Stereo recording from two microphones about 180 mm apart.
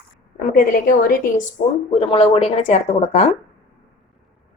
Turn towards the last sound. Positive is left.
turn(degrees=35)  # may be behind; listen again after turning